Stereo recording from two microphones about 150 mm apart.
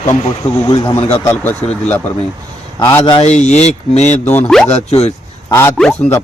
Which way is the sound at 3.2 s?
50° left (ahead or behind).